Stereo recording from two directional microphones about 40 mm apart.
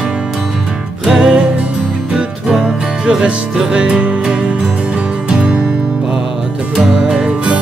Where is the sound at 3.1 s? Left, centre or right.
Right.